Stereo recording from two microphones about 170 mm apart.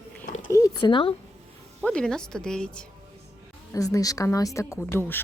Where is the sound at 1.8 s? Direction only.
5° left (ahead or behind).